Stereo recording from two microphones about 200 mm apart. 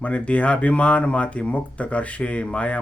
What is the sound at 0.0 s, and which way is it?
Speech, 5° left (ahead or behind).